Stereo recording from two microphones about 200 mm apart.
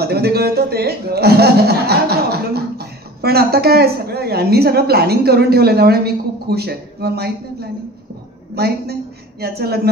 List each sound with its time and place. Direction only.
0.0 s speech: 55° right (ahead or behind)
8.5 s a woman's voice: 55° right (ahead or behind)